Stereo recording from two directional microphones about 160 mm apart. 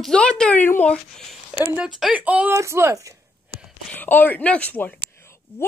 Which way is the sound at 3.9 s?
10° left (ahead or behind).